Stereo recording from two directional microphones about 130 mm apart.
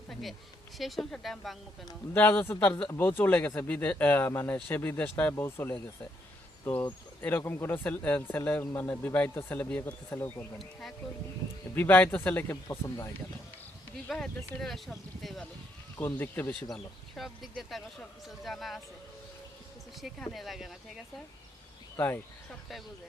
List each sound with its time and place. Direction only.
0.1 s insect: centre (ahead or behind)
0.8 s speech: centre (ahead or behind)
2.1 s speech: 15° left (ahead or behind)
7.2 s speech: 15° left (ahead or behind)
10.6 s speech: centre (ahead or behind)
11.7 s speech: 15° left (ahead or behind)
14.1 s speech: centre (ahead or behind)
16.0 s speech: 15° left (ahead or behind)
17.2 s speech: centre (ahead or behind)
20.0 s speech: centre (ahead or behind)
21.9 s speech: 15° left (ahead or behind)